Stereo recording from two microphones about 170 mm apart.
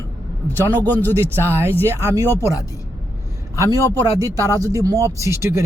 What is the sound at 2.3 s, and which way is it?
Speech, 15° left (ahead or behind).